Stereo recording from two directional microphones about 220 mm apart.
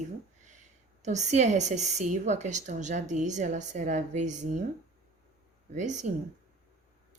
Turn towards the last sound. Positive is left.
turn(degrees=-35)  # may be behind; listen again after turning